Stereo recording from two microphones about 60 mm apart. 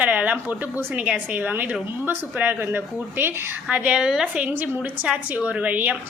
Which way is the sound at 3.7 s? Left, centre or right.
Right.